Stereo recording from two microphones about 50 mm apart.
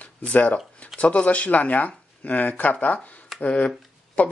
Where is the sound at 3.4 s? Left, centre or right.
Left.